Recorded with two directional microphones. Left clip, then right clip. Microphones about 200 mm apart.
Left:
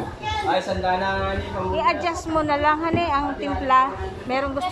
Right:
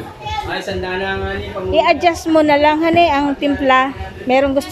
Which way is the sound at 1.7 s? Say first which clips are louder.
Right 9 dB; 45° right (ahead or behind).